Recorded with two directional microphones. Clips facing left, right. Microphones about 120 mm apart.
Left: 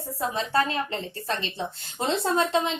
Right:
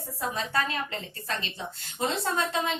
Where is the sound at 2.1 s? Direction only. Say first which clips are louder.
Left 6 dB; 30° left (ahead or behind).